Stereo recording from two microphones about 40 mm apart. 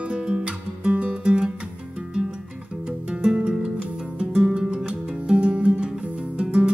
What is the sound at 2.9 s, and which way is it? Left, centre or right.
Music, right.